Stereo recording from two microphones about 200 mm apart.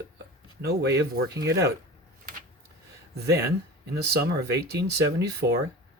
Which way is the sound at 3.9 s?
55° right (ahead or behind).